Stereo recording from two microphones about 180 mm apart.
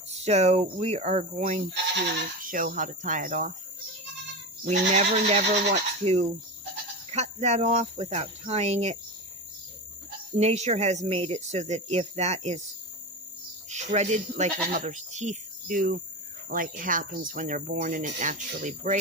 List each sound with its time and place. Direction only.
0.1 s speech: 35° right (ahead or behind)
4.6 s speech: 40° right (ahead or behind)
10.3 s speech: 40° right (ahead or behind)
13.7 s speech: 40° right (ahead or behind)